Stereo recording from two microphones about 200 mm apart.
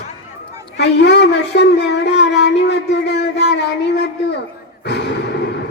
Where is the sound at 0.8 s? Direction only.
60° left (ahead or behind).